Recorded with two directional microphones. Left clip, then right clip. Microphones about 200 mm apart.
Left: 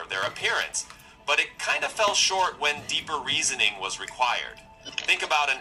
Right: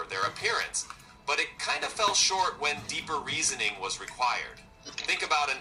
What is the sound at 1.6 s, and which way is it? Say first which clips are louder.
Speech: left 4 dB; 25° left (ahead or behind).